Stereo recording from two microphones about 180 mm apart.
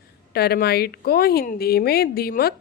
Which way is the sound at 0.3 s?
60° left (ahead or behind).